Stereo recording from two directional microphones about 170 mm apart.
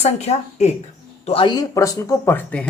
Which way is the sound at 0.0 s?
40° left (ahead or behind).